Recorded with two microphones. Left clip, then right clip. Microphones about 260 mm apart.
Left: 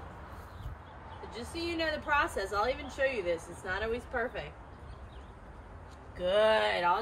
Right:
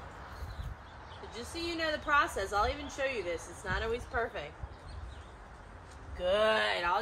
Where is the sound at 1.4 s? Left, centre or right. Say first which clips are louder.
Left 1 dB; centre.